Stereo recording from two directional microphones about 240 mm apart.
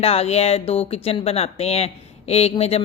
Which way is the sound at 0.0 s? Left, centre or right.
Left.